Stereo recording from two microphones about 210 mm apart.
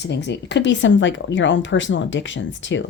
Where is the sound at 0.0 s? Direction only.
55° left (ahead or behind).